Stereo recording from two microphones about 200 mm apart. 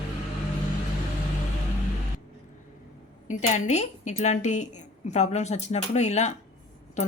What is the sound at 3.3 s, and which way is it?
A woman's voice, 35° left (ahead or behind).